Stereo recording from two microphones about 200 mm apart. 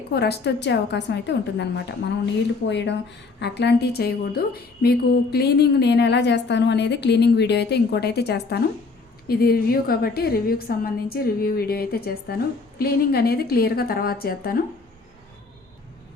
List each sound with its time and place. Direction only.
0.1 s a woman's voice: 55° left (ahead or behind)